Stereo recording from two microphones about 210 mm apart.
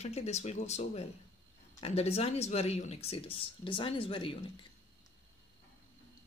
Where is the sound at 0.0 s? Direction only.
30° left (ahead or behind).